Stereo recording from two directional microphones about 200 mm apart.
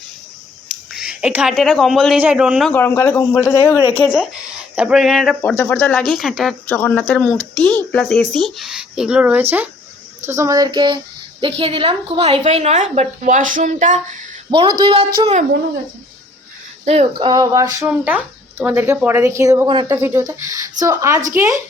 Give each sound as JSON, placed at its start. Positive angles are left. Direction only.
{"t": 0.7, "sound": "speech", "side_deg": -5}
{"t": 3.9, "sound": "speech", "side_deg": 0}
{"t": 5.4, "sound": "a woman's voice", "side_deg": 10}
{"t": 14.5, "sound": "a woman's voice", "side_deg": -25}
{"t": 16.8, "sound": "a woman's voice", "side_deg": -30}
{"t": 20.0, "sound": "speech", "side_deg": -10}